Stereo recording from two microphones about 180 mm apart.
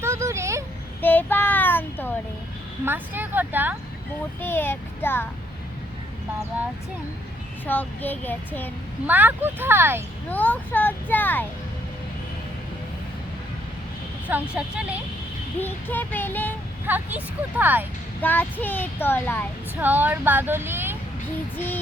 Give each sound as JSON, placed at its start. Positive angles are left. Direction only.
{"t": 0.0, "sound": "a sound", "side_deg": -15}
{"t": 1.0, "sound": "child singing", "side_deg": 10}
{"t": 2.8, "sound": "speech", "side_deg": -10}
{"t": 4.4, "sound": "a child's voice", "side_deg": 10}
{"t": 7.7, "sound": "a child's voice", "side_deg": 10}
{"t": 9.0, "sound": "speech", "side_deg": -10}
{"t": 10.2, "sound": "a child's voice", "side_deg": 10}
{"t": 14.3, "sound": "speech", "side_deg": -5}
{"t": 15.6, "sound": "a child's voice", "side_deg": 10}
{"t": 16.8, "sound": "speech", "side_deg": -10}
{"t": 18.2, "sound": "a child's voice", "side_deg": 10}
{"t": 19.7, "sound": "speech", "side_deg": -10}